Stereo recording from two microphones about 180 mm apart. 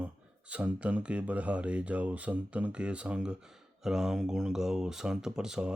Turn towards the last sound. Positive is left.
turn(degrees=-5)  # may be behind; listen again after turning